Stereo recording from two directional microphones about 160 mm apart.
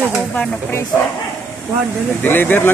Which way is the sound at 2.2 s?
10° left (ahead or behind).